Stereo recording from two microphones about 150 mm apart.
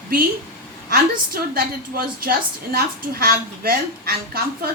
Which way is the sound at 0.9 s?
80° right.